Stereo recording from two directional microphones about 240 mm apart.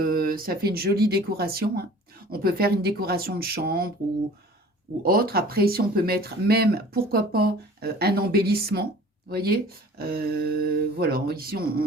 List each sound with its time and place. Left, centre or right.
0.0 s speech: right
5.0 s speech: right